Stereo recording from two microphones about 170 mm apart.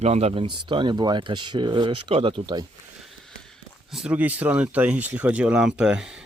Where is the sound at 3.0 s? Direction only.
Centre (ahead or behind).